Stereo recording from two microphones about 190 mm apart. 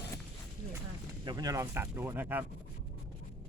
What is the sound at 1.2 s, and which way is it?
Sawing, 20° right (ahead or behind).